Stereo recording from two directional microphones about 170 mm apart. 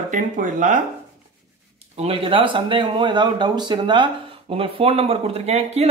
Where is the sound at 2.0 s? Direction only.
35° right (ahead or behind).